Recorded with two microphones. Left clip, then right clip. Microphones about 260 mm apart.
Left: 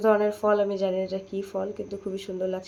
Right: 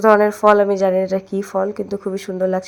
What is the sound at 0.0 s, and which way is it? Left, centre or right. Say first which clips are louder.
Speech: right 10 dB; right.